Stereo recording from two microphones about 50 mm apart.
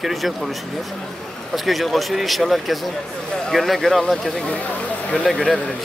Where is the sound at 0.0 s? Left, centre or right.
Centre.